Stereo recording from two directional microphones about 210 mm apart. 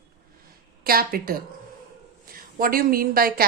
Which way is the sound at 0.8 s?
45° right (ahead or behind).